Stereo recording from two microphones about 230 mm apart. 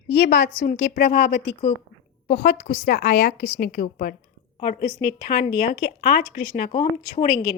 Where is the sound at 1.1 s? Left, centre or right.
Left.